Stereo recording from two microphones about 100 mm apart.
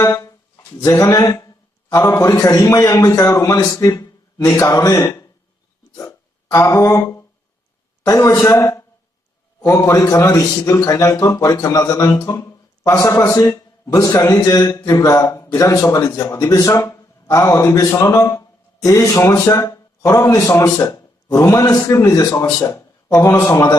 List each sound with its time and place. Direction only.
0.0 s speech: 35° left (ahead or behind)
6.0 s hiccup: 30° left (ahead or behind)
8.0 s a man's voice: 30° left (ahead or behind)
22.3 s speech: 20° left (ahead or behind)
22.6 s a man's voice: 30° left (ahead or behind)